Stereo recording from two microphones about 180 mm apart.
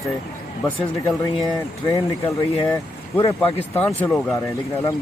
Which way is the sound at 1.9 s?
20° left (ahead or behind).